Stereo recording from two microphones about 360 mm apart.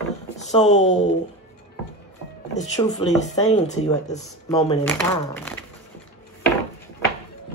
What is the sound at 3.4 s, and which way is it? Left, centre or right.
Speech, centre.